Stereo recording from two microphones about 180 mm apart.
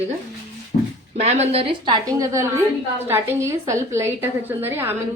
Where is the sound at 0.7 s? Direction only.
40° left (ahead or behind).